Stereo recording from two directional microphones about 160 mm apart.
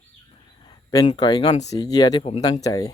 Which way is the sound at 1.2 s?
25° left (ahead or behind).